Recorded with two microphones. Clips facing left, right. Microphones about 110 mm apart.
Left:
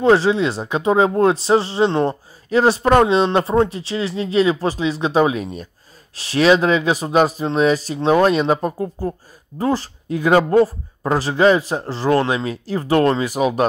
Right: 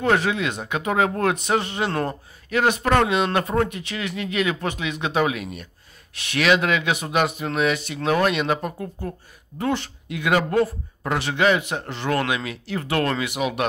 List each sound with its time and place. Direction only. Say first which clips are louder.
0.0 s speech: left 7 dB; 30° left (ahead or behind)